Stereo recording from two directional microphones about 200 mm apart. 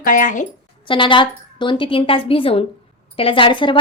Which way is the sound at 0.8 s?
25° left (ahead or behind).